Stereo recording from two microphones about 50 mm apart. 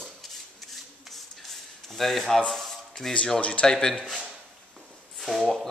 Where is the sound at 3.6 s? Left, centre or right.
Centre.